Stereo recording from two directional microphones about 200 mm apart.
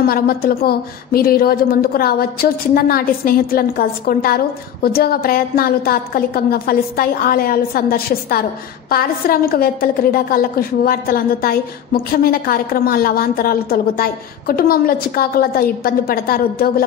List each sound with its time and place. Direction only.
0.0 s a woman's voice: 50° left (ahead or behind)